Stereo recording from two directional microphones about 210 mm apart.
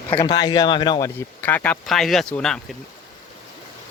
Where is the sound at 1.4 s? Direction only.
10° left (ahead or behind).